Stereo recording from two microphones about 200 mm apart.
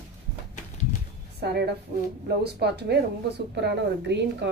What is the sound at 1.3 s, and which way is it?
A woman's voice, 55° right (ahead or behind).